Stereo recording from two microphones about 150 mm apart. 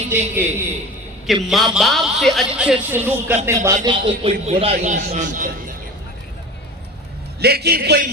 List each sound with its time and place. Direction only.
0.3 s a man's voice: 15° right (ahead or behind)
1.3 s a man's voice: centre (ahead or behind); by 3.8 s 20° right (ahead or behind)
3.8 s a man's voice: 35° right (ahead or behind); by 5.5 s 55° right (ahead or behind)
7.3 s a man's voice: 90° right